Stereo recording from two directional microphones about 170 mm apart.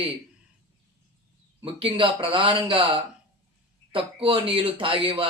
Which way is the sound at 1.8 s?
30° right (ahead or behind).